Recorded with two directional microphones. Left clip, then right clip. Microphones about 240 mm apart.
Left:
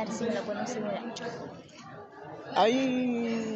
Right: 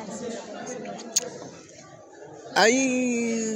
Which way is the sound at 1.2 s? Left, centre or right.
Right.